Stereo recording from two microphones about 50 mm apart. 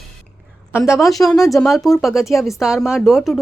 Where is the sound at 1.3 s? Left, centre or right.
Left.